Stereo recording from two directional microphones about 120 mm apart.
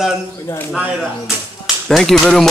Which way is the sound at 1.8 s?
5° left (ahead or behind).